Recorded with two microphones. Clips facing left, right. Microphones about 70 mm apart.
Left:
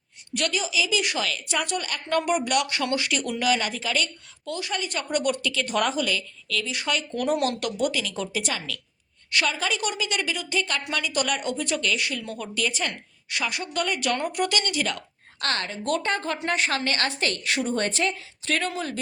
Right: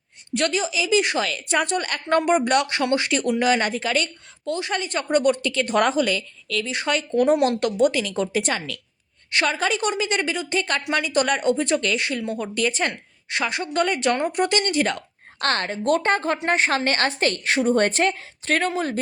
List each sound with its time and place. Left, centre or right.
0.3 s a woman's voice: right
12.2 s speech: right
12.5 s a woman's voice: right